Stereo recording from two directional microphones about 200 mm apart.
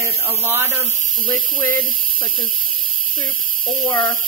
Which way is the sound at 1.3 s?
10° left (ahead or behind).